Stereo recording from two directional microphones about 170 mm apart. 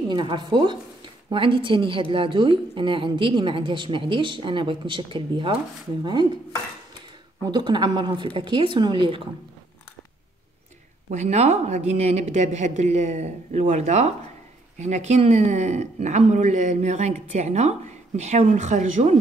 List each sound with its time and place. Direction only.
0.1 s a woman's voice: 25° right (ahead or behind)
7.4 s a woman's voice: 25° right (ahead or behind)
11.1 s speech: 40° right (ahead or behind)